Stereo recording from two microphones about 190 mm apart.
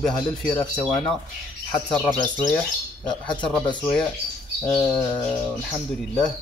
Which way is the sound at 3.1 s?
25° left (ahead or behind).